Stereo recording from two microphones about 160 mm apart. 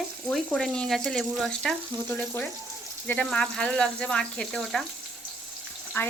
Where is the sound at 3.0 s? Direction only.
10° left (ahead or behind).